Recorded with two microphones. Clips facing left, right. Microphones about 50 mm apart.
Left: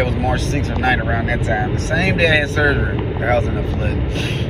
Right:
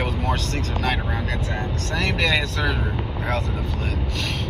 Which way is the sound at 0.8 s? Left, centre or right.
Left.